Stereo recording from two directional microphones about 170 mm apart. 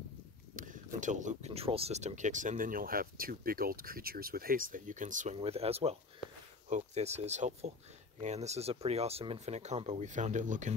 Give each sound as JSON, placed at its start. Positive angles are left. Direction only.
{"t": 0.6, "sound": "speech", "side_deg": -50}
{"t": 5.4, "sound": "speech", "side_deg": -35}